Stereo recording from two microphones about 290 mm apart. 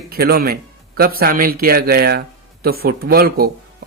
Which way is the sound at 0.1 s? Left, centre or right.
Right.